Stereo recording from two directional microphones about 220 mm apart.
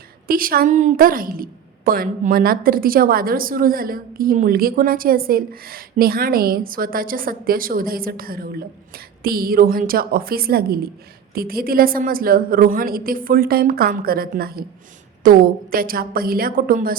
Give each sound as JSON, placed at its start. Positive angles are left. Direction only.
{"t": 0.3, "sound": "a woman's voice", "side_deg": -40}